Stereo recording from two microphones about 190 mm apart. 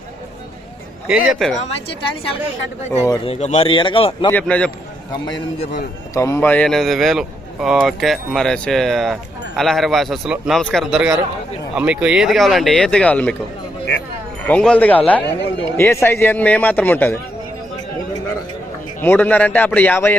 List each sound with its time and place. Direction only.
1.0 s speech: 5° right (ahead or behind)
1.5 s a woman's voice: 35° left (ahead or behind)
4.3 s speech: 5° left (ahead or behind)
6.1 s speech: 15° left (ahead or behind)
14.4 s speech: 5° left (ahead or behind)
15.2 s speech: 65° left (ahead or behind)
15.8 s speech: 15° left (ahead or behind)
19.0 s speech: 10° left (ahead or behind)